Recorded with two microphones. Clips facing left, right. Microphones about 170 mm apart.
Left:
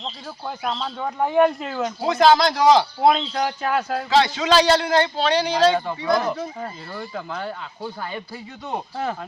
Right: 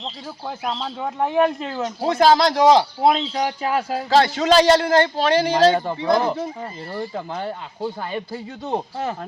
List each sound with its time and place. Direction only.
0.4 s speech: 5° right (ahead or behind)
2.0 s speech: 35° right (ahead or behind)
3.1 s speech: 10° right (ahead or behind)
4.1 s a man's voice: 45° right (ahead or behind)
6.0 s speech: 25° right (ahead or behind)